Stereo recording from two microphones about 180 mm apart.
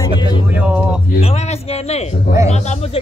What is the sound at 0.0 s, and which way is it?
Speech, 25° left (ahead or behind).